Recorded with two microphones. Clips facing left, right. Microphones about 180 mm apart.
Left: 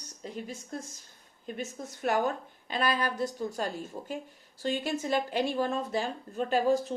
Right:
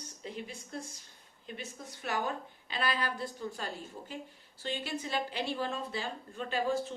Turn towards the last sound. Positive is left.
turn(degrees=45)  # may be behind; listen again after turning